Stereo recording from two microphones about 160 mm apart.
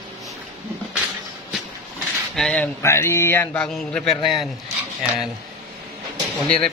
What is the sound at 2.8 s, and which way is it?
A man's voice, 20° left (ahead or behind).